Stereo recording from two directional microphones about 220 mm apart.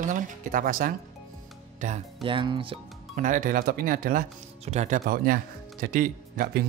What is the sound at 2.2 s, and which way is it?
Speech, 25° right (ahead or behind).